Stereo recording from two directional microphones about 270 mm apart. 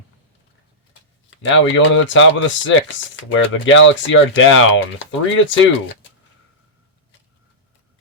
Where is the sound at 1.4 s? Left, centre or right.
Left.